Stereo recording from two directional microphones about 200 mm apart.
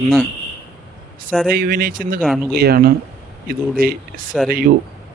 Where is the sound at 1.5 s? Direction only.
45° right (ahead or behind).